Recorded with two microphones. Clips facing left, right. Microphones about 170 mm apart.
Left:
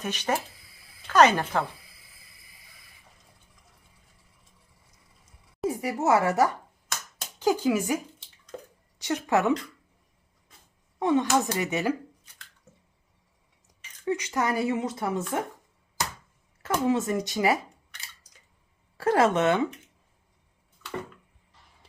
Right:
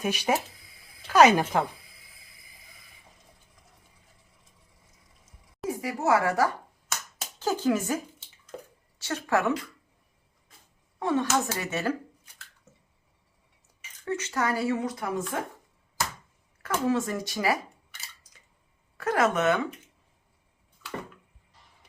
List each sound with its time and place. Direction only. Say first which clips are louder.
0.0 s speech: right 2 dB; 10° right (ahead or behind)
5.6 s speech: left 2 dB; 25° left (ahead or behind)
7.3 s a sound: left 2 dB; 10° left (ahead or behind)
9.0 s speech: left 2 dB; 15° left (ahead or behind)
11.0 s speech: left 3 dB; 20° left (ahead or behind)
14.0 s speech: left 2 dB; 15° left (ahead or behind)
16.6 s speech: left 2 dB; 20° left (ahead or behind)
18.9 s speech: left 3 dB; 30° left (ahead or behind)